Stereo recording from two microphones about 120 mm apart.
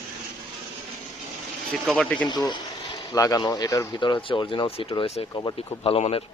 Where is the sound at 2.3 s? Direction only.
35° left (ahead or behind).